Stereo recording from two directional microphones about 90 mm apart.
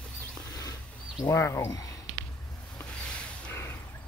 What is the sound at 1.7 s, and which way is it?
Speech, 40° left (ahead or behind).